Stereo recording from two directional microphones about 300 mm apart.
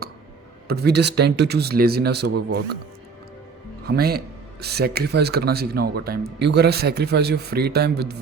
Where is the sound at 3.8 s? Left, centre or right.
Right.